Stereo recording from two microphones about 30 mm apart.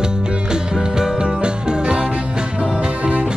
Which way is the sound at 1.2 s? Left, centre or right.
Right.